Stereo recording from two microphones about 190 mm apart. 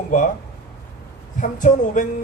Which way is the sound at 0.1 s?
40° left (ahead or behind).